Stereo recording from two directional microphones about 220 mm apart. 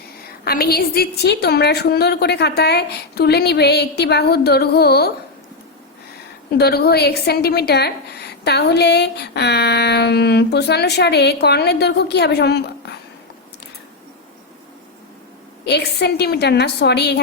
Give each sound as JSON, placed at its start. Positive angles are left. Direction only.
{"t": 0.4, "sound": "a woman's voice", "side_deg": 45}
{"t": 6.6, "sound": "a woman's voice", "side_deg": 45}
{"t": 15.6, "sound": "a woman's voice", "side_deg": 50}